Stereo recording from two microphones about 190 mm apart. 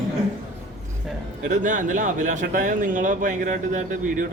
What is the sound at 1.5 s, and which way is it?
Speech, 40° right (ahead or behind).